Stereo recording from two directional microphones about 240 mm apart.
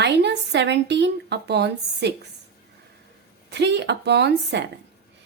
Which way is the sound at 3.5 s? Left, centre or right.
Right.